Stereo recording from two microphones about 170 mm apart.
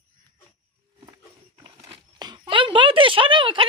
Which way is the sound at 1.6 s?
25° right (ahead or behind).